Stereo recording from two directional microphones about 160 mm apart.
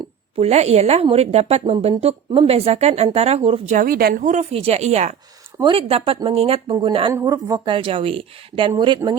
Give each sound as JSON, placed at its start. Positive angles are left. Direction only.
{"t": 0.3, "sound": "a woman's voice", "side_deg": -40}
{"t": 3.8, "sound": "speech", "side_deg": -70}
{"t": 5.5, "sound": "a woman's voice", "side_deg": -35}
{"t": 7.1, "sound": "a woman's voice", "side_deg": -20}